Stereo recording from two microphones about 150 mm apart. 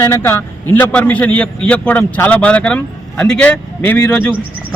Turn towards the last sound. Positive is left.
turn(degrees=10)  # may be behind; listen again after turning